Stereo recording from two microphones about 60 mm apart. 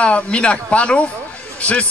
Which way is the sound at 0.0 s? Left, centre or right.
Centre.